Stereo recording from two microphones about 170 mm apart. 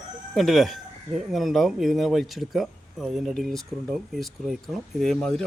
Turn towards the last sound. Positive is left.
turn(degrees=5)  # may be behind; listen again after turning